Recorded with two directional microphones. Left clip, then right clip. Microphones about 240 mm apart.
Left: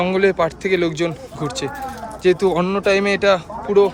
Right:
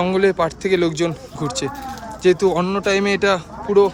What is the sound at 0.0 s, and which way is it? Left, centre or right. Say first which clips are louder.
Speech: even; centre.